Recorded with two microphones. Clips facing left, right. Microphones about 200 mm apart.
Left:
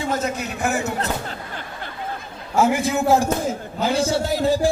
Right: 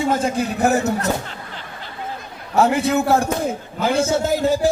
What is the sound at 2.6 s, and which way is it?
Speech, 65° right (ahead or behind).